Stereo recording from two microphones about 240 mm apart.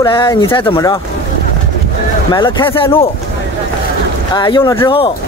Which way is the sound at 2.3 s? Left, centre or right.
Centre.